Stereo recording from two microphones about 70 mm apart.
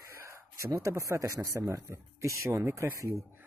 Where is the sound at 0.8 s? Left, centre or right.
Right.